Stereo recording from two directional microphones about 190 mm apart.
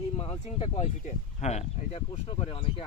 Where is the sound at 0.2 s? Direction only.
30° left (ahead or behind).